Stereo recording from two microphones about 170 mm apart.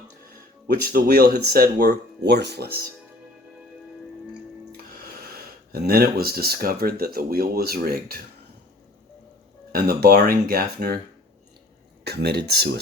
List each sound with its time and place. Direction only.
0.8 s speech: 60° right (ahead or behind)
5.2 s speech: 65° right (ahead or behind)
9.7 s speech: 65° right (ahead or behind)
12.0 s speech: 70° right (ahead or behind)